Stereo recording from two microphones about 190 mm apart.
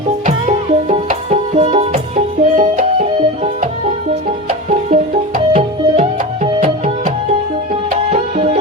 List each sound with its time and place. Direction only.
0.3 s music: 35° right (ahead or behind)